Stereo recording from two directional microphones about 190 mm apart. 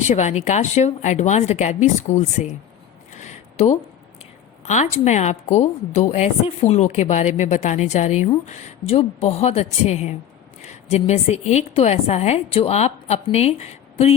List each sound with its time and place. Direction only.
0.1 s a woman's voice: 35° left (ahead or behind)
3.1 s a sound: 35° left (ahead or behind)
4.6 s a woman's voice: 40° left (ahead or behind)